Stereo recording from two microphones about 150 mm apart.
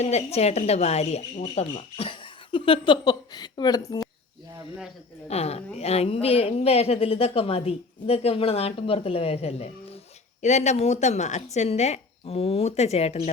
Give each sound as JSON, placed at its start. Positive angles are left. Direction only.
{"t": 0.0, "sound": "speech", "side_deg": 45}
{"t": 5.3, "sound": "a woman's voice", "side_deg": 45}